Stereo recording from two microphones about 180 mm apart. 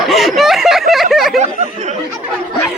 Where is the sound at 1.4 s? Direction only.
40° right (ahead or behind).